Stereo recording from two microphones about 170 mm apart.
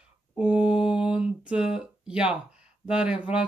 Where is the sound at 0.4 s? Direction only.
5° right (ahead or behind).